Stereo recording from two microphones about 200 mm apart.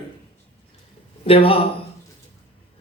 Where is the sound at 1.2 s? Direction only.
30° left (ahead or behind).